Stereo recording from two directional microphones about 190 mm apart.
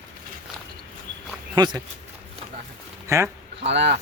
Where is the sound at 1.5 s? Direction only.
20° right (ahead or behind).